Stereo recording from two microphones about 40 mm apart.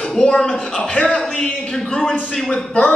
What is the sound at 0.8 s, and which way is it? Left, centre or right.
Speech, left.